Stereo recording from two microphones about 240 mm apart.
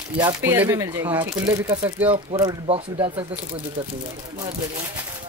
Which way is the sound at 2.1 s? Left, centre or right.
Centre.